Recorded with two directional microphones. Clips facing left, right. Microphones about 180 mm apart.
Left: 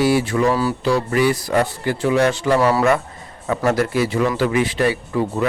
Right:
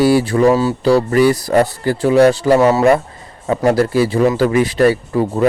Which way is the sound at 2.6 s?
20° right (ahead or behind).